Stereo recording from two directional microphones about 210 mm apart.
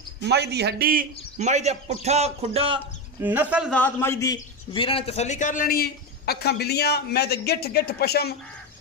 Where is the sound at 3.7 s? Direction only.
10° left (ahead or behind).